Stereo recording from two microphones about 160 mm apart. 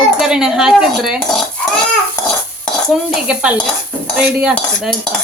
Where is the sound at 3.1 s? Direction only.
5° right (ahead or behind).